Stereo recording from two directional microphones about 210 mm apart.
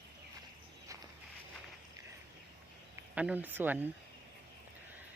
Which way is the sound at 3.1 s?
5° right (ahead or behind).